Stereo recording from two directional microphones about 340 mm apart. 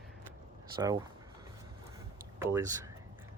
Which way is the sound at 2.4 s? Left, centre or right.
Centre.